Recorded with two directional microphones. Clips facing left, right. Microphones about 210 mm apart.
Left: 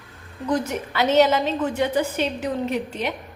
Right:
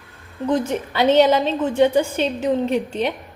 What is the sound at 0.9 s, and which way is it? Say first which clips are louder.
A woman's voice: right 3 dB; 30° right (ahead or behind).